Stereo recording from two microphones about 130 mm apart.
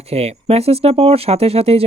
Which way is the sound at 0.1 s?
50° right (ahead or behind).